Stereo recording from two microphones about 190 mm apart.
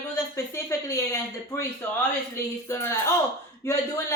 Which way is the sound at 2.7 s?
15° left (ahead or behind).